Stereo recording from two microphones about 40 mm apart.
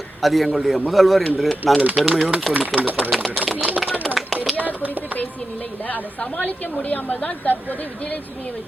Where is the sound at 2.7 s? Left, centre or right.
Right.